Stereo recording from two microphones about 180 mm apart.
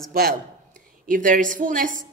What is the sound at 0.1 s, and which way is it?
A woman's voice, 55° right (ahead or behind).